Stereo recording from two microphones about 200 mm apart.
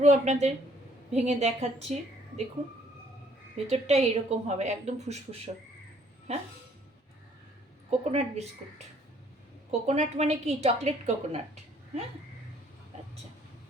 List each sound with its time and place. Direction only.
0.0 s a woman's voice: 35° right (ahead or behind)
3.7 s a woman's voice: 30° right (ahead or behind)
7.9 s a woman's voice: 30° right (ahead or behind)
9.8 s a woman's voice: 35° right (ahead or behind)